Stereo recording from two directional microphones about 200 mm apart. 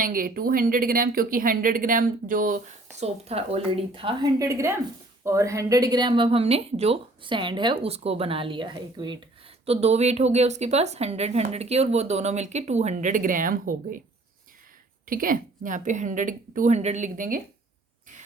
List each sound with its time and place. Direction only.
0.0 s a woman's voice: 45° right (ahead or behind)
15.0 s a woman's voice: 45° right (ahead or behind)